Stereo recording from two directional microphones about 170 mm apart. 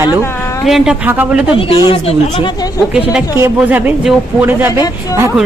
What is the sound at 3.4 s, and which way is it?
A woman's voice, 10° right (ahead or behind).